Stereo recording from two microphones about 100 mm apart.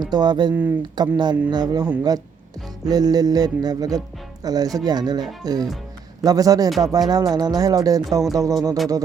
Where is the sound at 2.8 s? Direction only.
40° right (ahead or behind).